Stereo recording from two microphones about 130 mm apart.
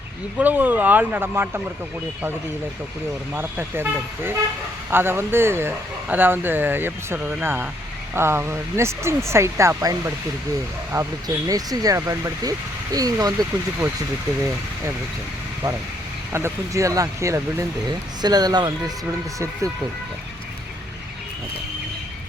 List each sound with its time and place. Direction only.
0.3 s speech: 15° right (ahead or behind)
3.3 s speech: 15° right (ahead or behind)
16.3 s speech: 20° right (ahead or behind)